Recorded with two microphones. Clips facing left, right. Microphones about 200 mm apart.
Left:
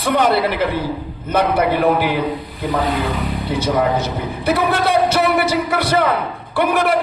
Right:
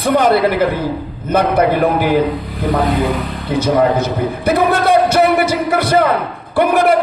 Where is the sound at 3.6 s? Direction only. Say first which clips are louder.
Right 5 dB; 50° right (ahead or behind).